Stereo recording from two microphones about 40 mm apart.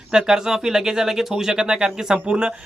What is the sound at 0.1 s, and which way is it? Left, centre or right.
Speech, centre.